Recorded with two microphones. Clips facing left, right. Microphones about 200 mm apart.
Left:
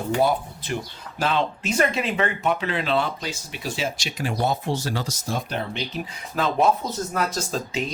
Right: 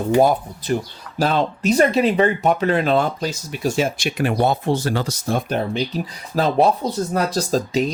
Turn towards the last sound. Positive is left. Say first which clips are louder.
# right 8 dB
turn(degrees=-40)  # may be behind; listen again after turning